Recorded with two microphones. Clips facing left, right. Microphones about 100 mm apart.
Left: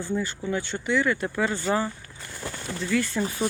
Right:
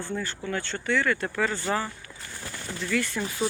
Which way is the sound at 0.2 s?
15° left (ahead or behind).